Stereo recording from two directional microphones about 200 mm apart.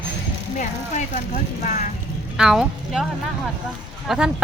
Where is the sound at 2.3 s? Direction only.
5° right (ahead or behind).